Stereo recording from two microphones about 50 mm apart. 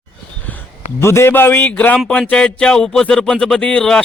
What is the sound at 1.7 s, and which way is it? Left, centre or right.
Speech, left.